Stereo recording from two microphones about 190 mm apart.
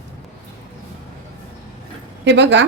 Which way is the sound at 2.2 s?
70° right (ahead or behind).